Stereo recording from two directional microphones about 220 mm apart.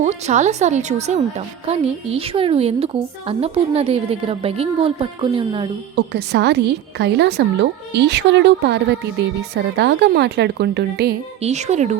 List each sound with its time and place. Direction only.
0.0 s a woman's voice: 30° right (ahead or behind)
6.0 s speech: 50° right (ahead or behind)
11.4 s a woman's voice: 30° right (ahead or behind)